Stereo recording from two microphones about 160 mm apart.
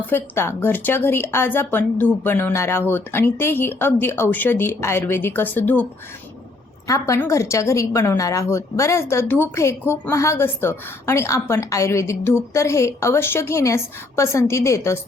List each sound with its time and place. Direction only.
0.0 s a woman's voice: 15° left (ahead or behind)
6.8 s a woman's voice: 20° left (ahead or behind)